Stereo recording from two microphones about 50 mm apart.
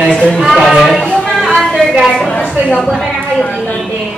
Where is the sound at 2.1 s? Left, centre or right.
Centre.